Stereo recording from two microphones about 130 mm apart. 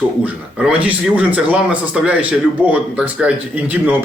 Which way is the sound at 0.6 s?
10° right (ahead or behind).